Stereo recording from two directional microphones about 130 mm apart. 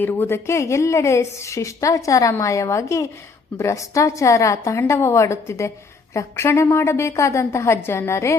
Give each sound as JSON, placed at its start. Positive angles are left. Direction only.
{"t": 0.0, "sound": "a woman's voice", "side_deg": 15}